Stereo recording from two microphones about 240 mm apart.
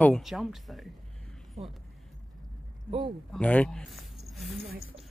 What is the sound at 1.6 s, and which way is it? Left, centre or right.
Speech, right.